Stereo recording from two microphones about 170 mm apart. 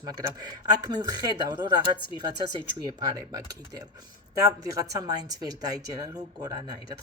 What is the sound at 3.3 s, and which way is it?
Speech, 20° right (ahead or behind).